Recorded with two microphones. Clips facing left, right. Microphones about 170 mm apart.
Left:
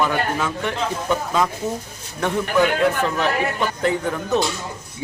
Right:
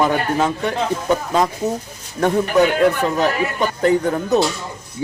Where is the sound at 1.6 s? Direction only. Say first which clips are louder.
Right 4 dB; 20° right (ahead or behind).